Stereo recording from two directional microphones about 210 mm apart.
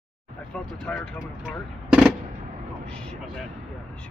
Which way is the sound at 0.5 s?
5° left (ahead or behind).